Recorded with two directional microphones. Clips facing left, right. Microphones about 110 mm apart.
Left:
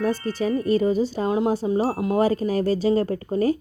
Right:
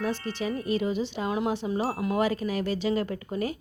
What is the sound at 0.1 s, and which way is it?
Speech, 45° left (ahead or behind).